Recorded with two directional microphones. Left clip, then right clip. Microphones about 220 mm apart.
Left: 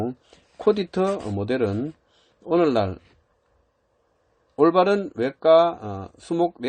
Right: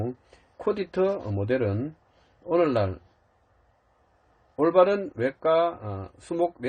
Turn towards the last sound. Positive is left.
turn(degrees=45)  # may be behind; listen again after turning